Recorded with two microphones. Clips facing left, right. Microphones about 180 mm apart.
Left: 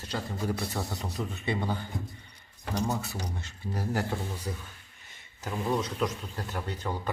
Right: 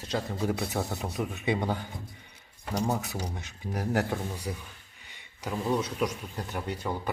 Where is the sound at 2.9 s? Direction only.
15° right (ahead or behind).